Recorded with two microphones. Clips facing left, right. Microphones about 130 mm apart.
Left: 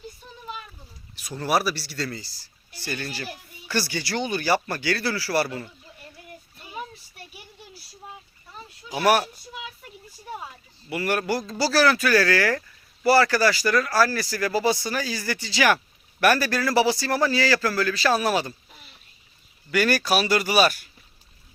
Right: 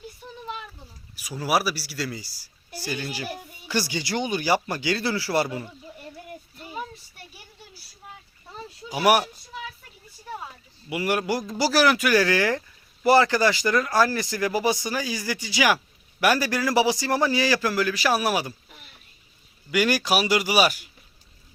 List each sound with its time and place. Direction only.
1.1 s speech: 5° right (ahead or behind)
8.9 s speech: 15° right (ahead or behind)
10.8 s speech: 15° right (ahead or behind)
19.7 s speech: 15° right (ahead or behind)